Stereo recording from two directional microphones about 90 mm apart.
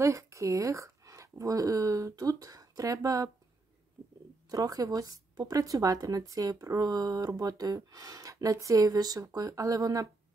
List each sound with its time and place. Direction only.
0.0 s speech: 35° right (ahead or behind)
4.5 s speech: 45° right (ahead or behind)